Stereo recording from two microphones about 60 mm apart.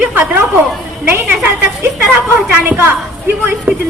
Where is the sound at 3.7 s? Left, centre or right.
Right.